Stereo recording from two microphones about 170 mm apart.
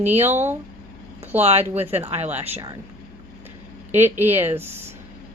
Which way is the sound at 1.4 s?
40° right (ahead or behind).